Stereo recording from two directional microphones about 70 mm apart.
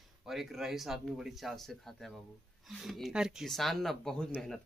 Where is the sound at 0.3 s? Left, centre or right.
Centre.